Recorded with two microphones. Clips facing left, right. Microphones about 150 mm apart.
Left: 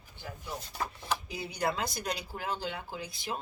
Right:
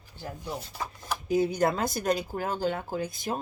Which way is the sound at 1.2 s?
45° right (ahead or behind).